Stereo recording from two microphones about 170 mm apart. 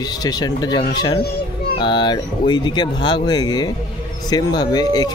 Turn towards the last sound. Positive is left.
turn(degrees=20)  # may be behind; listen again after turning